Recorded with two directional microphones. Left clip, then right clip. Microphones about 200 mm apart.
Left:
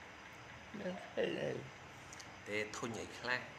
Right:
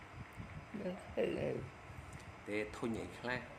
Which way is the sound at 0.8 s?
5° right (ahead or behind).